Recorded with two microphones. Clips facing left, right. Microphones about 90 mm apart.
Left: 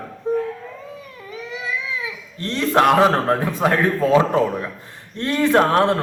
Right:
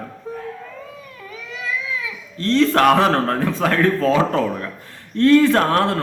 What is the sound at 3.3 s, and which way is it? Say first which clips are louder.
Speech: left 1 dB; 20° left (ahead or behind).